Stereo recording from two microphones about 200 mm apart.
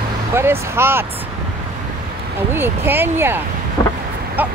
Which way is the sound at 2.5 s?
10° right (ahead or behind).